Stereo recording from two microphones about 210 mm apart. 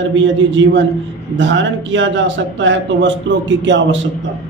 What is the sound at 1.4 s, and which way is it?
A man's voice, 60° right (ahead or behind).